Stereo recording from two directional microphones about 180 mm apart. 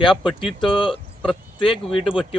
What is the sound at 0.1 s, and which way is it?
Speech, centre (ahead or behind).